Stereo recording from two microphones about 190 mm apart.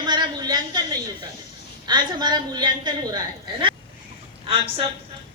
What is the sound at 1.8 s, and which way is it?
A woman's voice, 20° right (ahead or behind).